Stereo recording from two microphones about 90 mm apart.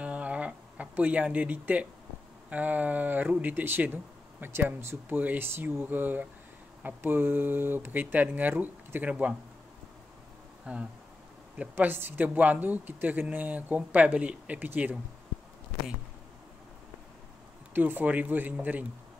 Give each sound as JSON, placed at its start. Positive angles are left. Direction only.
{"t": 0.0, "sound": "a sound", "side_deg": -15}
{"t": 2.5, "sound": "speech", "side_deg": -15}
{"t": 10.6, "sound": "speech", "side_deg": -10}
{"t": 17.7, "sound": "speech", "side_deg": -20}